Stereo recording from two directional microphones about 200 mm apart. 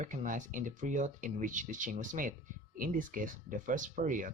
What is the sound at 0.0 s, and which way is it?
Speech, 40° right (ahead or behind).